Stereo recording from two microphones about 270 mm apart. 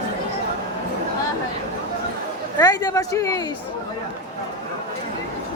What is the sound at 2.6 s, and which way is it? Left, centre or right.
Speech, centre.